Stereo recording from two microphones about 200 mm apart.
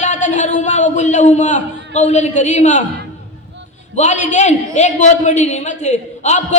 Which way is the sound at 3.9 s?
35° left (ahead or behind).